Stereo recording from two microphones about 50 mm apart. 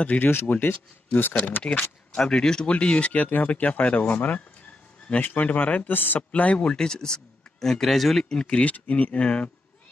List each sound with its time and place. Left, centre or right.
0.2 s speech: left
1.3 s speech: left
2.1 s speech: centre
2.6 s speech: left; by 8.3 s centre
8.3 s speech: centre